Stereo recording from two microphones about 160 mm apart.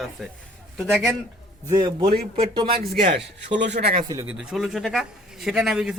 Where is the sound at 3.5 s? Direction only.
90° right.